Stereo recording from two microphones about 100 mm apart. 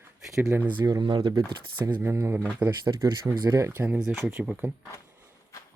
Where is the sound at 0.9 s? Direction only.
45° right (ahead or behind).